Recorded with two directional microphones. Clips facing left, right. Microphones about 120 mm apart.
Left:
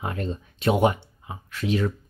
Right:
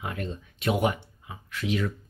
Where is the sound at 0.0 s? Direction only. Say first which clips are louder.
Left 4 dB; 35° left (ahead or behind).